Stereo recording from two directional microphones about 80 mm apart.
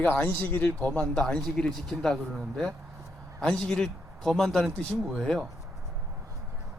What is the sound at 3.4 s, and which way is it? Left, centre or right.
Speech, centre.